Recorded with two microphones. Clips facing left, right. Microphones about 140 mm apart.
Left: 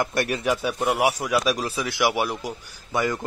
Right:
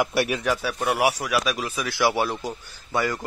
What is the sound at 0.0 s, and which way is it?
Speech, 5° right (ahead or behind).